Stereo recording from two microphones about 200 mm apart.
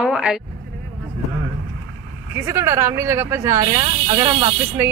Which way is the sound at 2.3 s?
15° right (ahead or behind).